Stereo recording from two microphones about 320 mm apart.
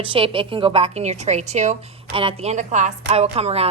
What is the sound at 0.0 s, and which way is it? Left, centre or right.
A woman's voice, centre.